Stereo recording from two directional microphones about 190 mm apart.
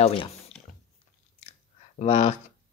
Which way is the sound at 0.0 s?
25° left (ahead or behind).